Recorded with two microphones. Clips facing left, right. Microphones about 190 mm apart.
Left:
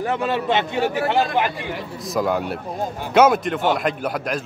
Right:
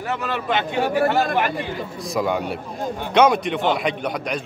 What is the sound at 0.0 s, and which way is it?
Speech, 30° left (ahead or behind).